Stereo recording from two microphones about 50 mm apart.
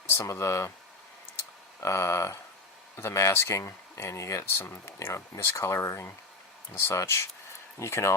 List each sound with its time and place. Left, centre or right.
0.3 s speech: left
1.8 s speech: left
2.9 s speech: left
4.4 s speech: left
6.7 s speech: left